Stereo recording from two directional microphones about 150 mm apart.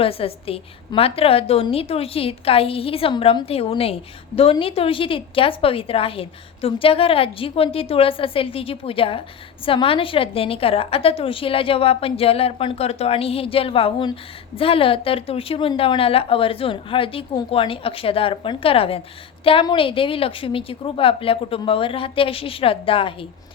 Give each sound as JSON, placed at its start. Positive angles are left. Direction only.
{"t": 0.0, "sound": "a woman's voice", "side_deg": 40}